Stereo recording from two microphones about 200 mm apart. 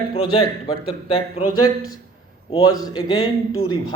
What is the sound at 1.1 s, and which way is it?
Speech, 30° left (ahead or behind).